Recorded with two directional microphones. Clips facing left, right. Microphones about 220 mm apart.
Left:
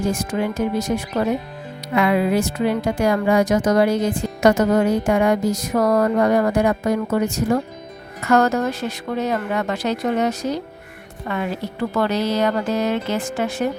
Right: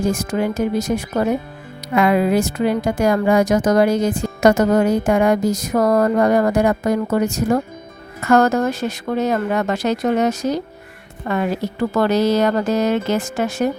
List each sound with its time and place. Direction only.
0.0 s a woman's voice: 45° right (ahead or behind)